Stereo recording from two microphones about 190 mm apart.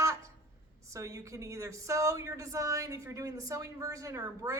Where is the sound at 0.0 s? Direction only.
15° right (ahead or behind).